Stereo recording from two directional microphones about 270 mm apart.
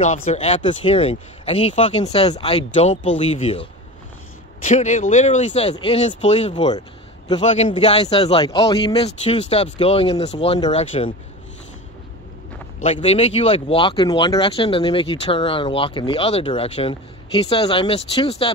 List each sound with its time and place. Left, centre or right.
0.0 s speech: left
4.6 s speech: left
12.8 s speech: left